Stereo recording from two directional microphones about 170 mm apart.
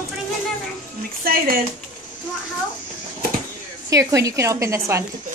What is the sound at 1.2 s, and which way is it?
Speech, 60° right (ahead or behind).